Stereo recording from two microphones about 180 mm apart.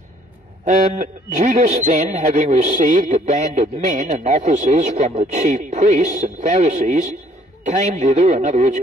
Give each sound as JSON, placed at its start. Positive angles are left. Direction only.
{"t": 0.7, "sound": "a man's voice", "side_deg": -40}
{"t": 7.6, "sound": "a man's voice", "side_deg": -40}